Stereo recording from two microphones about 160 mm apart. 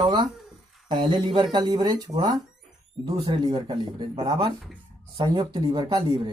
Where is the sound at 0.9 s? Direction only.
30° right (ahead or behind).